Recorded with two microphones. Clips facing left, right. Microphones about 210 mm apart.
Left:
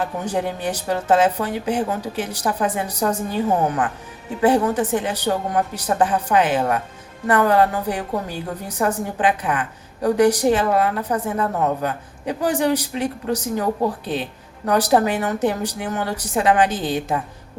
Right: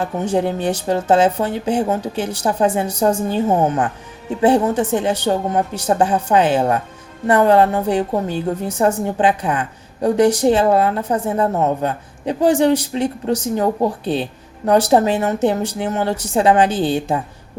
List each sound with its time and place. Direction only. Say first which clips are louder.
0.0 s a woman's voice: right 4 dB; 30° right (ahead or behind)